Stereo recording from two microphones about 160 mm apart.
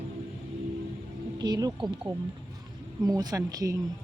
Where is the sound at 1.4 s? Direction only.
25° right (ahead or behind).